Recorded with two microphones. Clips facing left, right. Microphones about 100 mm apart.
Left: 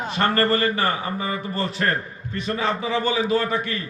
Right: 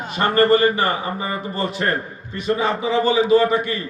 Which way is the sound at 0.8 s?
35° right (ahead or behind).